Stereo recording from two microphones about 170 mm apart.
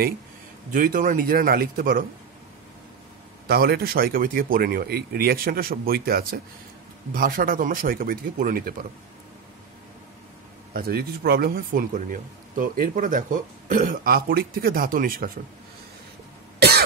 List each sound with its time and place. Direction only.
0.7 s a man's voice: 55° right (ahead or behind)
3.4 s a man's voice: 65° right (ahead or behind)
10.7 s a man's voice: 60° right (ahead or behind)
16.5 s cough: 70° right (ahead or behind)